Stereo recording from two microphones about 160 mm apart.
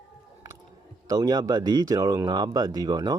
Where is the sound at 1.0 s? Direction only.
25° right (ahead or behind).